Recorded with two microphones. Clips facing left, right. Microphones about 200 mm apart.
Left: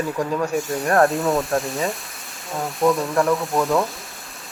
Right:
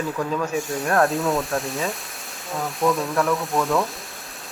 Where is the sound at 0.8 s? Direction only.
Centre (ahead or behind).